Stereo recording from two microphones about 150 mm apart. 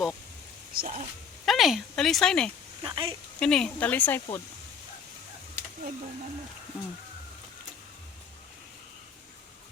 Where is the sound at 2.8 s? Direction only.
35° right (ahead or behind).